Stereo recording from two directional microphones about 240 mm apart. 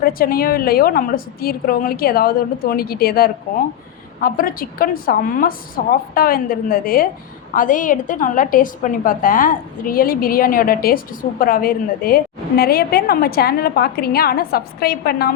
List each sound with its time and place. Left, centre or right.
0.0 s a woman's voice: left